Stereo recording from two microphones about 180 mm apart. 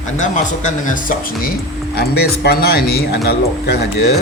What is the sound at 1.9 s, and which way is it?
Speech, 60° left (ahead or behind).